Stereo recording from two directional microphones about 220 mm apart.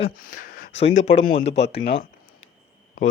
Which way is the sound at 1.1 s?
30° left (ahead or behind).